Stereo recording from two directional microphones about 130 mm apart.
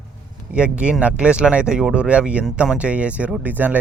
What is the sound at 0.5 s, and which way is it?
Speech, 10° right (ahead or behind).